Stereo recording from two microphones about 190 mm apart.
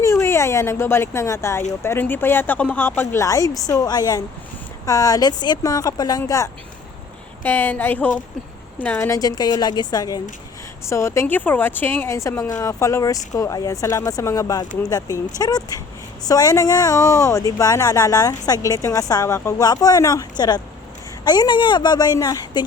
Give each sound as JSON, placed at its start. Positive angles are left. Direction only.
{"t": 0.0, "sound": "speech", "side_deg": 15}